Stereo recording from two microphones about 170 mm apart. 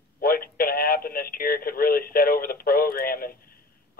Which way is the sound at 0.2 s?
60° left (ahead or behind).